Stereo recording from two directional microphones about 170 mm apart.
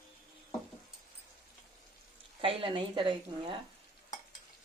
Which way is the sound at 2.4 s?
30° right (ahead or behind).